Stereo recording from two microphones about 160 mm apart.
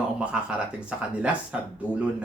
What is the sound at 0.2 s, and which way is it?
Speech, 5° right (ahead or behind).